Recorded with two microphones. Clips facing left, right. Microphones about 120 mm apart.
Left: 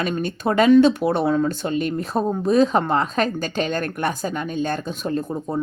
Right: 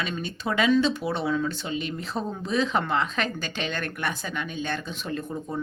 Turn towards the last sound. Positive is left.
turn(degrees=35)  # may be behind; listen again after turning